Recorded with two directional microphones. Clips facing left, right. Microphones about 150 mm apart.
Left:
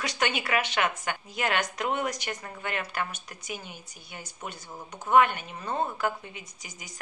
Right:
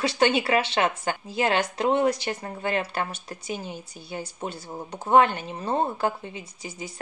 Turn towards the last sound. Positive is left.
turn(degrees=-30)  # may be behind; listen again after turning